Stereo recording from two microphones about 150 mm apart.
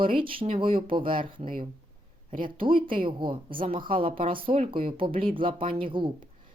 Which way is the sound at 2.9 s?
35° right (ahead or behind).